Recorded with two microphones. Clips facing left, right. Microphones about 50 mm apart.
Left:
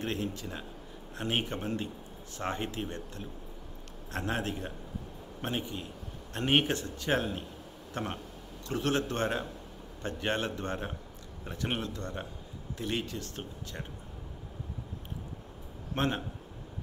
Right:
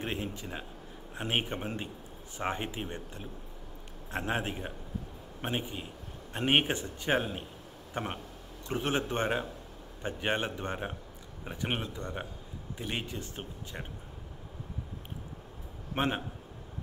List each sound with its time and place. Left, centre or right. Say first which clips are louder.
0.0 s a man's voice: left 2 dB; centre
15.9 s a man's voice: even; centre